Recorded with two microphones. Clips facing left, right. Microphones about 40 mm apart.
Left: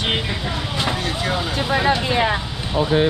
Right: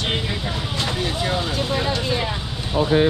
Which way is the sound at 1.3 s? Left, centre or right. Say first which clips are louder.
Left 2 dB; centre.